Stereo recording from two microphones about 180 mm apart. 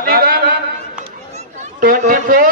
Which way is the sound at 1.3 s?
45° right (ahead or behind).